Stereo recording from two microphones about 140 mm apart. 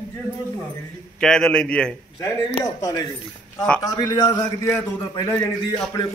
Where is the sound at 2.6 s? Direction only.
25° left (ahead or behind).